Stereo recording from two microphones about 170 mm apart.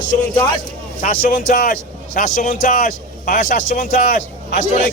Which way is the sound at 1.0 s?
50° left (ahead or behind).